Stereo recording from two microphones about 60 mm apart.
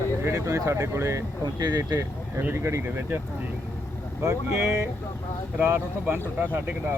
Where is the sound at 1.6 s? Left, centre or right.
Right.